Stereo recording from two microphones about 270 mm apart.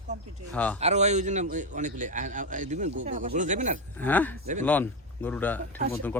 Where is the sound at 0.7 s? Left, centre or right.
Right.